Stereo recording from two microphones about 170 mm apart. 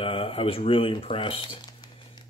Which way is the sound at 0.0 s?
35° left (ahead or behind).